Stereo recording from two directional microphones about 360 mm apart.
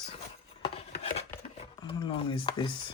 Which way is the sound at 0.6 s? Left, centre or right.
Centre.